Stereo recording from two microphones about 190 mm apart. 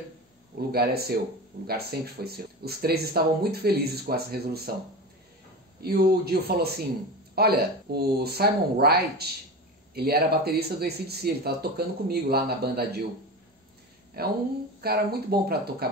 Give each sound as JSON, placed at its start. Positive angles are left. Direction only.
{"t": 0.6, "sound": "speech", "side_deg": -55}
{"t": 5.8, "sound": "speech", "side_deg": -55}
{"t": 14.2, "sound": "speech", "side_deg": -55}